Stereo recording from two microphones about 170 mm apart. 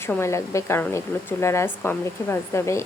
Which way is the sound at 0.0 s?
15° left (ahead or behind).